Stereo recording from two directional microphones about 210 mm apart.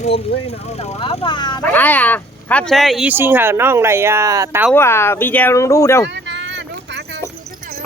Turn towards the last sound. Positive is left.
turn(degrees=-55)  # may be behind; listen again after turning